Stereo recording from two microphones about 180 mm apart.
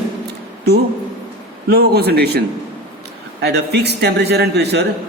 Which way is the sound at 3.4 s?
65° right (ahead or behind).